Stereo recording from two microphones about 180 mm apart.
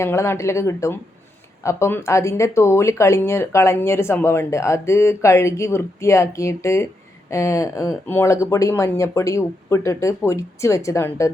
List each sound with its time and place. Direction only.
0.0 s speech: 15° left (ahead or behind)